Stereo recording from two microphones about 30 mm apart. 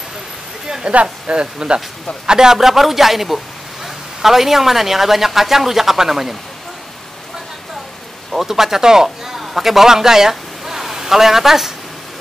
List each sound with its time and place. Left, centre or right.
0.9 s speech: right
2.2 s a man's voice: centre
8.3 s a man's voice: centre